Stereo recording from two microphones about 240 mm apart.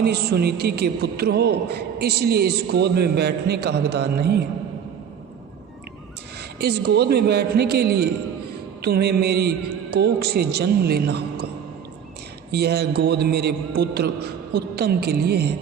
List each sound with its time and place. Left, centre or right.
0.0 s a man's voice: right
6.6 s a man's voice: right
12.5 s a man's voice: right